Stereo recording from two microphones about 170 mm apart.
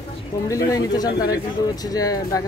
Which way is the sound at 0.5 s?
20° left (ahead or behind).